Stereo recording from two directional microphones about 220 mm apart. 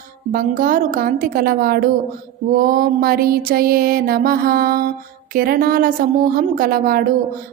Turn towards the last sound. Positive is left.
turn(degrees=-40)  # may be behind; listen again after turning